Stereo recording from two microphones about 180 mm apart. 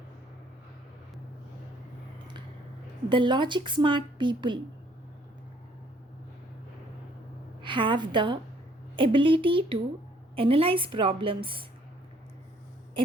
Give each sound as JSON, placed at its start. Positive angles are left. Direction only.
{"t": 3.1, "sound": "speech", "side_deg": -25}
{"t": 7.6, "sound": "a woman's voice", "side_deg": -25}